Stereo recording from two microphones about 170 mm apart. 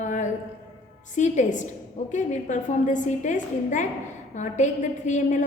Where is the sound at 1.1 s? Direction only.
45° left (ahead or behind).